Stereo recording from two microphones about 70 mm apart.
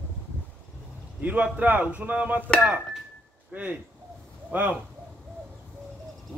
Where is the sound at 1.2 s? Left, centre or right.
Right.